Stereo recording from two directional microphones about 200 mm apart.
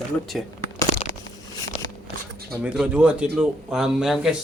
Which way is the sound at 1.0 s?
30° left (ahead or behind).